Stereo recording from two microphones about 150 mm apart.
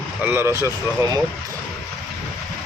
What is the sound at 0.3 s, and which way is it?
Speech, 15° right (ahead or behind).